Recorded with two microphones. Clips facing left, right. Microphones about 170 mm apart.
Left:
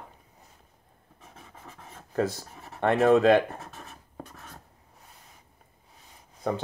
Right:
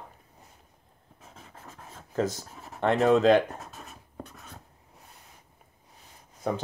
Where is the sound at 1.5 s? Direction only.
10° left (ahead or behind).